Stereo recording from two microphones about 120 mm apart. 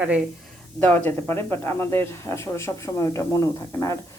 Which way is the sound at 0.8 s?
15° left (ahead or behind).